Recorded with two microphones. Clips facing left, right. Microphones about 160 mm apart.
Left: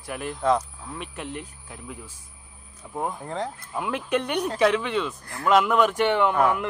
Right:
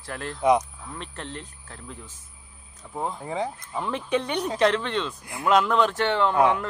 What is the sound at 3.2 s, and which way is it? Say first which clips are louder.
Speech: right 2 dB; 5° right (ahead or behind).